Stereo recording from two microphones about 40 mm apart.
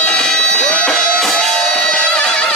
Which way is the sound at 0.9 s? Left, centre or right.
Centre.